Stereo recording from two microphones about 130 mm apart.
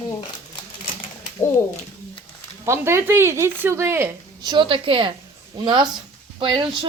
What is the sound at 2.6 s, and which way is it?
Speech, 20° right (ahead or behind).